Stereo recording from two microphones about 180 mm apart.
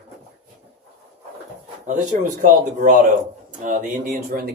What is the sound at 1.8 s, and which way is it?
Speech, 45° right (ahead or behind).